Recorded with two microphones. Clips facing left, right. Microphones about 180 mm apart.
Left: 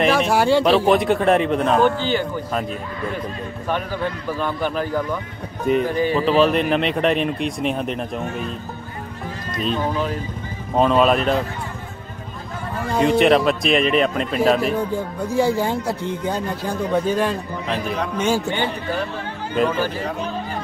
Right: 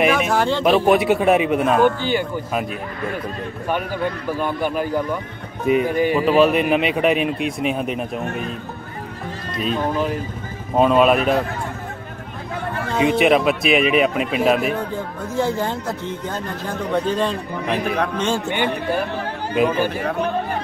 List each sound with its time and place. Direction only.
0.3 s speech: 10° left (ahead or behind)
0.7 s speech: 10° right (ahead or behind)
4.3 s speech: 10° right (ahead or behind)
9.7 s speech: 10° right (ahead or behind)
12.9 s speech: 5° right (ahead or behind)
15.3 s speech: 10° left (ahead or behind)
17.8 s speech: 60° right (ahead or behind)
18.1 s speech: 10° left (ahead or behind)
19.5 s speech: 5° right (ahead or behind)
20.0 s speech: 60° right (ahead or behind)